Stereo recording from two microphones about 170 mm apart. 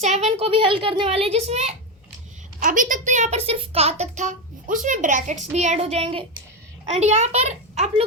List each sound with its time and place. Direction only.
0.0 s a child's voice: 40° right (ahead or behind)
2.6 s a child's voice: 50° right (ahead or behind)